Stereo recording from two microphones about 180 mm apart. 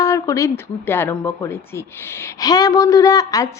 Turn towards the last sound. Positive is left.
turn(degrees=20)  # may be behind; listen again after turning